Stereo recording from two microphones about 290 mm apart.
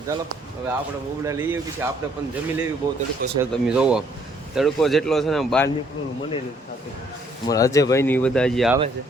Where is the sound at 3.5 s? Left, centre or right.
Centre.